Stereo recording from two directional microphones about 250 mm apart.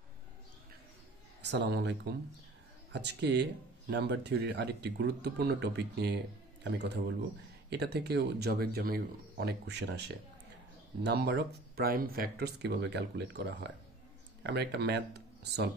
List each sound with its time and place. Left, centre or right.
1.4 s speech: right